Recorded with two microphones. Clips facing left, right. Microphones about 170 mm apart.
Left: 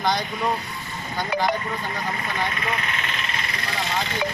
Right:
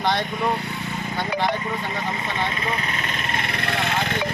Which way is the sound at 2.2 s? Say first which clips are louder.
Right 1 dB; 30° right (ahead or behind).